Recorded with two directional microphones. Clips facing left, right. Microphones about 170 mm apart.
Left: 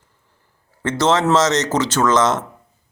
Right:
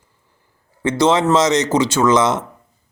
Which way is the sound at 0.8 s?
15° right (ahead or behind).